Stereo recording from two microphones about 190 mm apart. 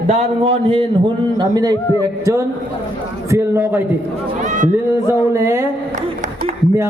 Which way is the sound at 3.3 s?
10° right (ahead or behind).